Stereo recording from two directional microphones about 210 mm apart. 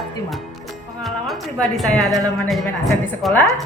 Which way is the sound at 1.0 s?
Centre (ahead or behind).